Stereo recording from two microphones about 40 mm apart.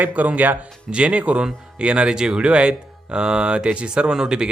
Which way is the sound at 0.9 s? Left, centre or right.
Right.